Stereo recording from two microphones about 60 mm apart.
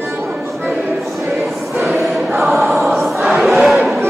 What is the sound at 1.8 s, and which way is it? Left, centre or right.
Choir, centre.